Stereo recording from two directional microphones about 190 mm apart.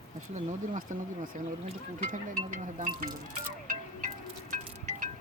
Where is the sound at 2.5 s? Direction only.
40° right (ahead or behind).